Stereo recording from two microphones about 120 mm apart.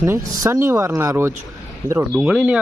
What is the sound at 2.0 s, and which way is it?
Speech, 10° right (ahead or behind).